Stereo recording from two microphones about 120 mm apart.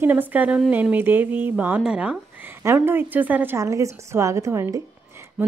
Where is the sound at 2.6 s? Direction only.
20° right (ahead or behind).